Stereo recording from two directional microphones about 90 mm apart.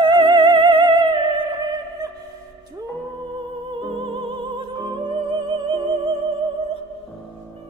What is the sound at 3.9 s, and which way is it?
Music, 70° right (ahead or behind).